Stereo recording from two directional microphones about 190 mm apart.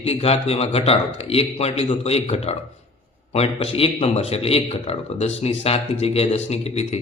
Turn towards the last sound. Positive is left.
turn(degrees=35)  # may be behind; listen again after turning